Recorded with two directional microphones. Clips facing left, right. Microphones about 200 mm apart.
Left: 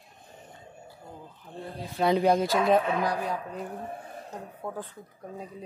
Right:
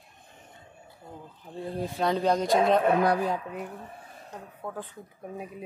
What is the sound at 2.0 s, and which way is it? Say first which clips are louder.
Speech: left 3 dB; 10° left (ahead or behind).